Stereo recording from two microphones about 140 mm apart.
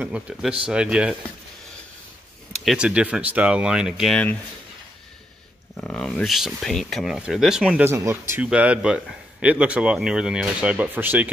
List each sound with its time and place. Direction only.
0.0 s speech: 5° right (ahead or behind)
2.6 s speech: 5° right (ahead or behind)
5.8 s speech: 5° left (ahead or behind)
7.9 s speech: 20° right (ahead or behind)
8.4 s speech: 10° right (ahead or behind)